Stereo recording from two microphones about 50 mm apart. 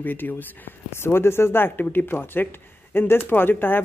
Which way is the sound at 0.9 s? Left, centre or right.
Left.